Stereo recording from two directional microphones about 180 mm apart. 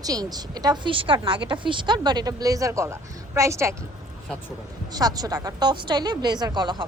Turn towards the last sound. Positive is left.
turn(degrees=-25)  # may be behind; listen again after turning